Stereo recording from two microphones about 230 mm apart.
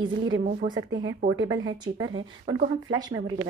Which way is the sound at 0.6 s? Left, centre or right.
Right.